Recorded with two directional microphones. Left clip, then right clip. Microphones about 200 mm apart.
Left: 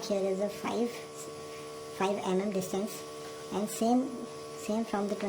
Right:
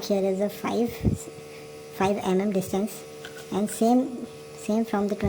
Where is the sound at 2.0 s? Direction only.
15° right (ahead or behind).